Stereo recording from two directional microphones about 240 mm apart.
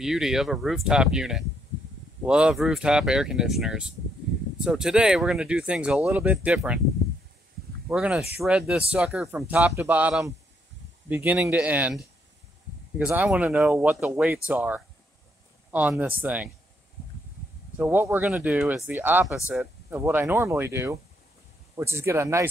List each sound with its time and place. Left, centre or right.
0.0 s speech: centre
7.9 s speech: centre
17.7 s speech: centre